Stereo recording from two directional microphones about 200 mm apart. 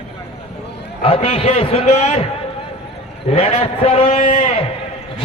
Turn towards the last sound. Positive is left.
turn(degrees=35)  # may be behind; listen again after turning